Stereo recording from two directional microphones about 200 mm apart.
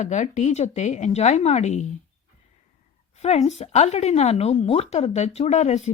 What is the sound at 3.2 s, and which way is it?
Speech, 35° left (ahead or behind).